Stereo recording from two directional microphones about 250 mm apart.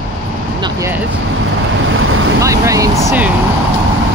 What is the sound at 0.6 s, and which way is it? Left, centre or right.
Speech, centre.